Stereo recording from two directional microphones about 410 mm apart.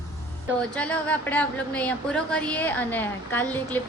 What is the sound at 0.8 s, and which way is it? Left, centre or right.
A woman's voice, centre.